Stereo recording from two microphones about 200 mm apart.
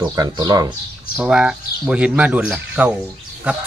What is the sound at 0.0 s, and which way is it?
Speech, 20° right (ahead or behind).